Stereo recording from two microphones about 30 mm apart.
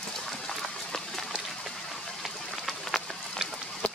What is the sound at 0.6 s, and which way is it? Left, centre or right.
Run, centre.